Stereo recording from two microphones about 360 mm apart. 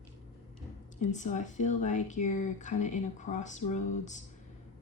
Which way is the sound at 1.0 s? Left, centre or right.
Centre.